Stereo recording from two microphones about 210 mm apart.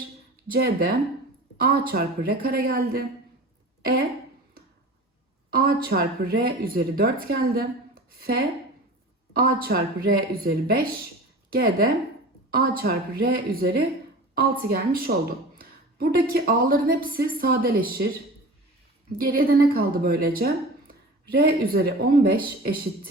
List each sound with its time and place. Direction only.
0.4 s speech: 45° right (ahead or behind)
5.5 s speech: 45° right (ahead or behind)
19.1 s speech: 45° right (ahead or behind)